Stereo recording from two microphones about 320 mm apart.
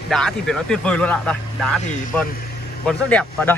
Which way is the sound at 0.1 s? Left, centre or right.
Centre.